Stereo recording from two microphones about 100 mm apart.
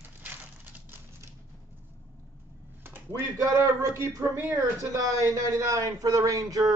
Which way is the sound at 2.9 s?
30° right (ahead or behind).